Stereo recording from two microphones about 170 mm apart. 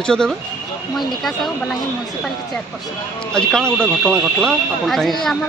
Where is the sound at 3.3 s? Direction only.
5° left (ahead or behind).